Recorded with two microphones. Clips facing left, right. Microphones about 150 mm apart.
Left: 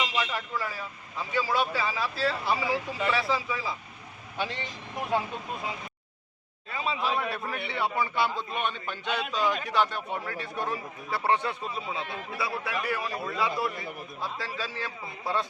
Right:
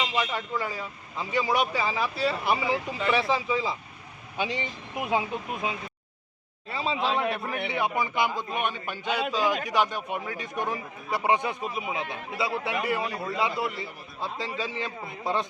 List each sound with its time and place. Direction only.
0.2 s a man's voice: 20° right (ahead or behind)
6.7 s a man's voice: 30° right (ahead or behind)